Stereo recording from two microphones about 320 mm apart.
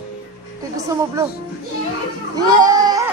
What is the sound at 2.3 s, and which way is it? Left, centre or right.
Goat, centre.